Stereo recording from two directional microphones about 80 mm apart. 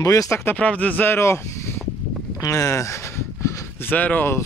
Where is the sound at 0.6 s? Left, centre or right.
Centre; by 1.7 s left.